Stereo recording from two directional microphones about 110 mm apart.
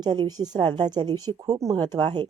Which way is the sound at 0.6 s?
50° right (ahead or behind).